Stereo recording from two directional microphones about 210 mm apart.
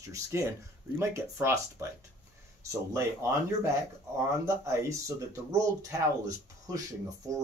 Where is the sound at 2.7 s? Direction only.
15° right (ahead or behind).